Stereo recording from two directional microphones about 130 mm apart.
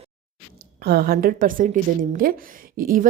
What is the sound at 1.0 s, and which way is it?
A woman's voice, 90° right.